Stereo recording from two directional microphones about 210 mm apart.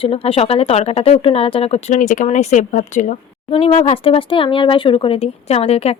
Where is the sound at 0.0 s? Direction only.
25° left (ahead or behind).